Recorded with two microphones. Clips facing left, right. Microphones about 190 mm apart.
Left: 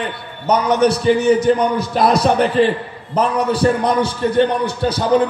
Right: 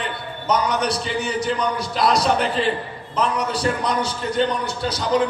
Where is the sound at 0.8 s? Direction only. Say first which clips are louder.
Left 10 dB; 50° left (ahead or behind).